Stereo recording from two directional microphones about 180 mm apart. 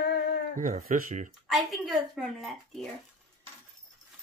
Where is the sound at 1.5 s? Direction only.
Centre (ahead or behind).